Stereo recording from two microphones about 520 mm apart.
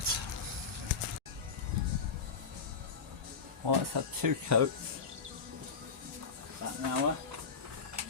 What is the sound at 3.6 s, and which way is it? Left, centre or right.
Speech, right.